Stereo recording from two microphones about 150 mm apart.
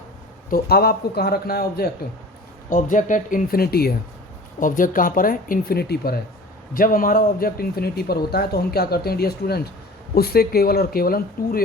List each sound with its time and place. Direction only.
0.5 s speech: 90° left
2.6 s speech: 65° left (ahead or behind); by 3.9 s 90° left
4.6 s speech: 65° left (ahead or behind); by 6.1 s 90° left
6.7 s speech: 70° left (ahead or behind)